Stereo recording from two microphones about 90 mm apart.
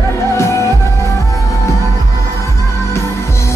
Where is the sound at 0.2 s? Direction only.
30° left (ahead or behind).